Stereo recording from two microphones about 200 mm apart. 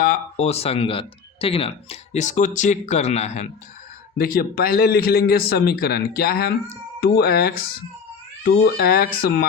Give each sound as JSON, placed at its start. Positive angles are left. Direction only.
{"t": 0.0, "sound": "speech", "side_deg": 40}
{"t": 4.2, "sound": "a man's voice", "side_deg": 50}